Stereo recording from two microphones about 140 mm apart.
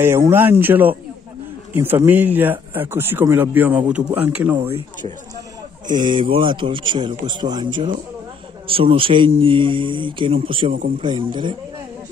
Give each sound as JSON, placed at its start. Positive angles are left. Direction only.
{"t": 0.0, "sound": "speech", "side_deg": -15}
{"t": 5.9, "sound": "a man's voice", "side_deg": -30}